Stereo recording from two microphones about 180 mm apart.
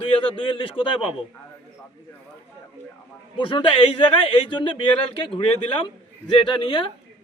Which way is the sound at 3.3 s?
30° left (ahead or behind).